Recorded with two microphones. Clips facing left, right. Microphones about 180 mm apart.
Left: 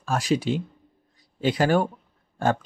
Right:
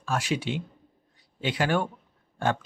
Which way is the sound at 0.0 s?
40° left (ahead or behind).